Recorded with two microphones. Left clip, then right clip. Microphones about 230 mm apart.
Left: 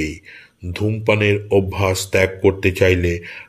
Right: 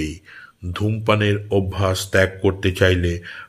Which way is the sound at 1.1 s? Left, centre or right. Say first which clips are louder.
Left 5 dB; right.